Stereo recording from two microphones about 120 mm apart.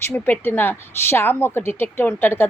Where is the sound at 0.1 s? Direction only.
15° left (ahead or behind).